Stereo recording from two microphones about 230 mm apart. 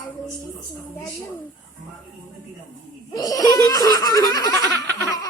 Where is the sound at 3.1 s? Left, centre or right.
Centre.